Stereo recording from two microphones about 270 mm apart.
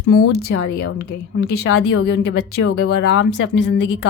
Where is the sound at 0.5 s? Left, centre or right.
Left.